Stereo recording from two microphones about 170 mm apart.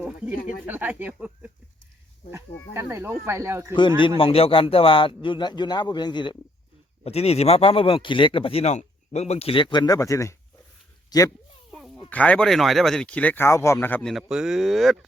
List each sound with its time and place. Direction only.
0.0 s speech: 10° right (ahead or behind)
4.2 s speech: 35° left (ahead or behind)
7.0 s speech: 35° left (ahead or behind)
11.7 s speech: centre (ahead or behind)
14.1 s speech: centre (ahead or behind)